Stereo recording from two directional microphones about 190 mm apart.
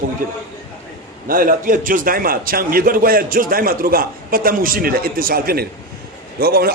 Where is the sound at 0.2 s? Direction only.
45° right (ahead or behind).